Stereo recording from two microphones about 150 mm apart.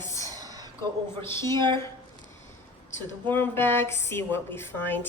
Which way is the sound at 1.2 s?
15° left (ahead or behind).